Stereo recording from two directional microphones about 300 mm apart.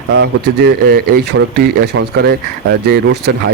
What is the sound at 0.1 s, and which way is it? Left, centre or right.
A man's voice, right.